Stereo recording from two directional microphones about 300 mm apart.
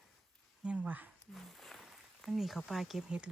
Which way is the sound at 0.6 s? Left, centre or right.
Centre.